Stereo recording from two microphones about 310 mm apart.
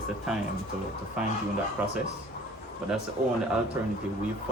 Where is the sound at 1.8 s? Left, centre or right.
Centre.